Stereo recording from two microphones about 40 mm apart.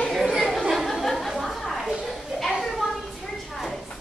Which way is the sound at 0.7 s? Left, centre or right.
Centre.